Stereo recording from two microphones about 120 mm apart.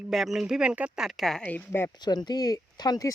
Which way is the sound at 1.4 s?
15° left (ahead or behind).